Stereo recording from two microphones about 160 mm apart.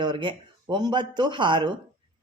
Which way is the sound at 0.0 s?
30° right (ahead or behind).